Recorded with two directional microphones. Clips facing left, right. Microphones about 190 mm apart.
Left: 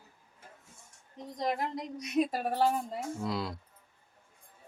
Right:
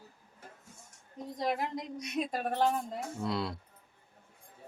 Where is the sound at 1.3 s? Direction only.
5° right (ahead or behind).